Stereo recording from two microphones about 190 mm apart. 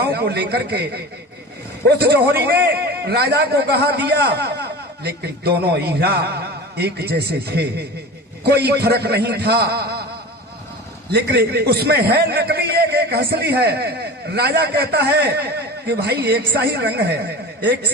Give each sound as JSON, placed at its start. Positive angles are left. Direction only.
{"t": 0.0, "sound": "a man's voice", "side_deg": -60}
{"t": 11.1, "sound": "a man's voice", "side_deg": -60}